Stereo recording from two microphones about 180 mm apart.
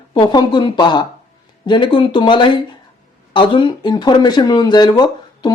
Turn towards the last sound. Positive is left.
turn(degrees=25)  # may be behind; listen again after turning